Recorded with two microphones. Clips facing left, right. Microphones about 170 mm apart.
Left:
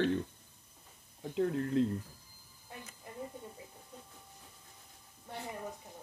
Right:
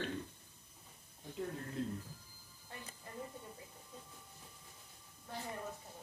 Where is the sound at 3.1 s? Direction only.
15° left (ahead or behind).